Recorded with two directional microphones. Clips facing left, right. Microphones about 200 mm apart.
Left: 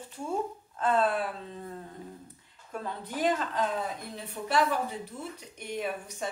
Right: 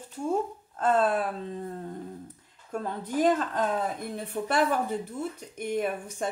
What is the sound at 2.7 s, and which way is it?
A woman's voice, 45° right (ahead or behind).